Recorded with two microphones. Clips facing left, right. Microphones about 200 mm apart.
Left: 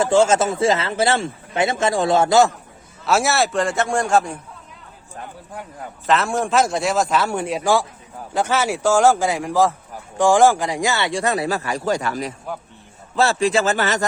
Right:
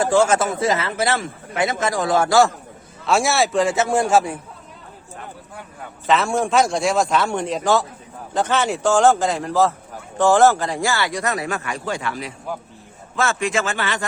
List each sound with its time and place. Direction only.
0.0 s a man's voice: 25° left (ahead or behind)
3.1 s a man's voice: centre (ahead or behind)
6.1 s a man's voice: centre (ahead or behind); by 14.0 s 40° left (ahead or behind)